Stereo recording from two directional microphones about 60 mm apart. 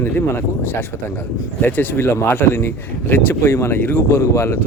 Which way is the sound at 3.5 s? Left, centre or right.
Left.